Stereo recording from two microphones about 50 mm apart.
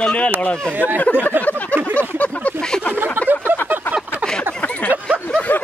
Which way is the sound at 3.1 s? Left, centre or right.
Right.